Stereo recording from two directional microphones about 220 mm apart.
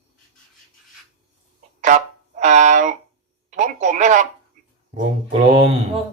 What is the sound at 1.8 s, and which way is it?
Speech, 35° right (ahead or behind).